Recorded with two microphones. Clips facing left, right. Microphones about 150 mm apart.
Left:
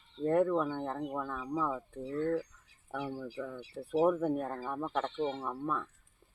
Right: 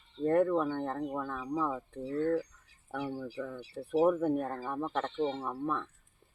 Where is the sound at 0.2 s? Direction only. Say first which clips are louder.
Right 1 dB; 5° left (ahead or behind).